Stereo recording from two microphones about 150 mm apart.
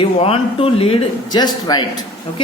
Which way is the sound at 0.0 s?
40° left (ahead or behind).